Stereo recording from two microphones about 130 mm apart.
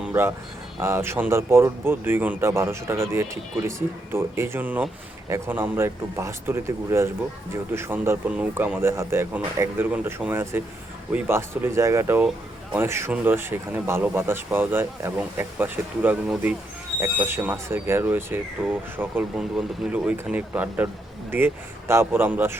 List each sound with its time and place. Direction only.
0.1 s speech: 20° right (ahead or behind)
17.2 s speech: 15° right (ahead or behind)